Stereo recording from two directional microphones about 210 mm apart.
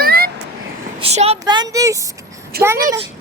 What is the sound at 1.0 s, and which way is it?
Speech, 30° right (ahead or behind).